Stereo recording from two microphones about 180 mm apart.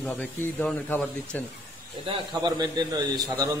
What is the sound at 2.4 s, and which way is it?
A man's voice, 20° right (ahead or behind).